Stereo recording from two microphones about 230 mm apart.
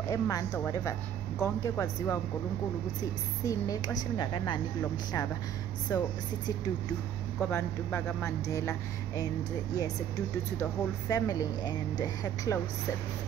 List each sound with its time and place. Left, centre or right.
0.1 s speech: centre
5.9 s speech: centre
7.3 s speech: centre
10.6 s speech: centre